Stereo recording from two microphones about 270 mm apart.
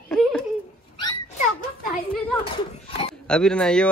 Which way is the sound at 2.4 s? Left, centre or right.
Left.